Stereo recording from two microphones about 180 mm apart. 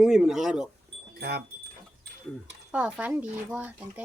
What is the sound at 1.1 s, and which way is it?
Speech, 60° right (ahead or behind).